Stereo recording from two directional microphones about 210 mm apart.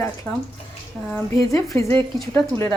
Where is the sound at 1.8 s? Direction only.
30° right (ahead or behind).